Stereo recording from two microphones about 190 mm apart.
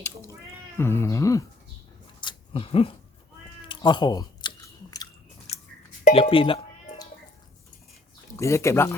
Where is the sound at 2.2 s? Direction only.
25° left (ahead or behind).